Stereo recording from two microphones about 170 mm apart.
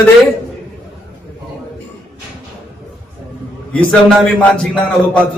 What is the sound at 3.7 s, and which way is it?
Speech, 5° left (ahead or behind).